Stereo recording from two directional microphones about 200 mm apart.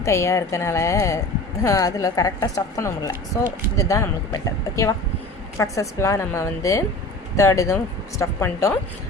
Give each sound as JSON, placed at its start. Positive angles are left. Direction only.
{"t": 0.0, "sound": "a woman's voice", "side_deg": 15}